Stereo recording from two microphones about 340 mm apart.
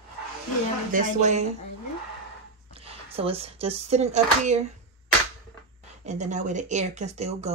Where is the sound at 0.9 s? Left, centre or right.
Right.